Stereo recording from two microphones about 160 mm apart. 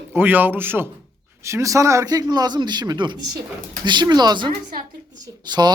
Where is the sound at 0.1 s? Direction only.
10° right (ahead or behind).